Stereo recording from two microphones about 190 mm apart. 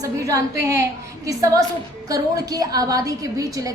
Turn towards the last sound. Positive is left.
turn(degrees=-20)  # may be behind; listen again after turning